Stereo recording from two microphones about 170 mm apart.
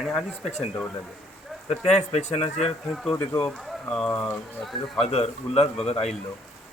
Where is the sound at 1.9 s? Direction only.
40° left (ahead or behind).